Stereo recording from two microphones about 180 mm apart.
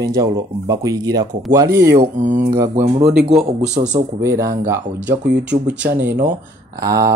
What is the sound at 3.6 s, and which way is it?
Speech, 40° right (ahead or behind).